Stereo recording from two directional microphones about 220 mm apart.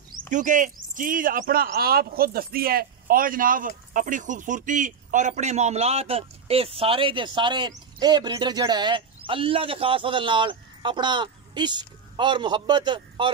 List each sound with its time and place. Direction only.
0.3 s speech: 35° right (ahead or behind)